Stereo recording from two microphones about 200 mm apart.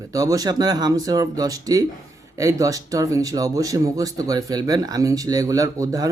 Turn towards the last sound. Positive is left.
turn(degrees=-15)  # may be behind; listen again after turning